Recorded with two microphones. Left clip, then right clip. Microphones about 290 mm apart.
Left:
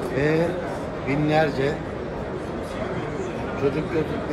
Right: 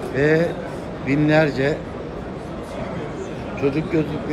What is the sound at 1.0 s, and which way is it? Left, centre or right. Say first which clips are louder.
Speech: right 4 dB; centre.